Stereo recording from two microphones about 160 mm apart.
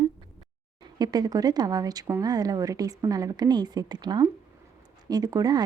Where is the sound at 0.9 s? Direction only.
25° right (ahead or behind).